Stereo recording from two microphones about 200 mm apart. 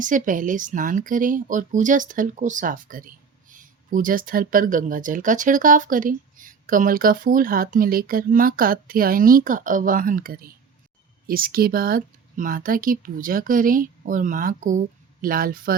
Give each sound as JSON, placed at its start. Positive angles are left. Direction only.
{"t": 0.0, "sound": "speech", "side_deg": -40}